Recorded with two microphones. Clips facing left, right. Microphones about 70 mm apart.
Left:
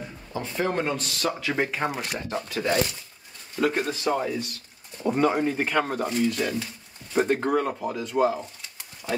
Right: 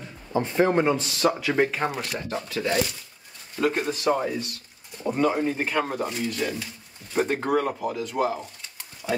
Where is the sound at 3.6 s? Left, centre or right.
Centre.